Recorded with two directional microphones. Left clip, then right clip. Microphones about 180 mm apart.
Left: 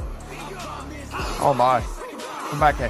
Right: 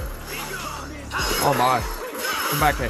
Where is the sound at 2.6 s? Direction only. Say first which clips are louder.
Left 3 dB; 15° right (ahead or behind).